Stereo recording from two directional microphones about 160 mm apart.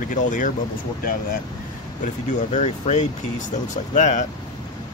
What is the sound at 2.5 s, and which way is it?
Speech, 45° left (ahead or behind).